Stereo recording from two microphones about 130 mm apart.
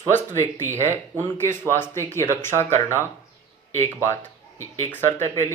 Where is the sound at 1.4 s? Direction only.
20° left (ahead or behind).